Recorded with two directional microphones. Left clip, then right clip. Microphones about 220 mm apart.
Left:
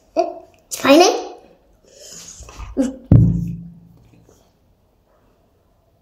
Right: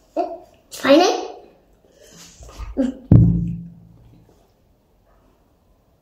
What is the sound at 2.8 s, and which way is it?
Music, 40° left (ahead or behind).